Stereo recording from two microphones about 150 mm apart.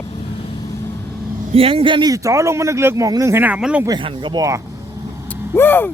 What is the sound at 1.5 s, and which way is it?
Speech, 40° right (ahead or behind).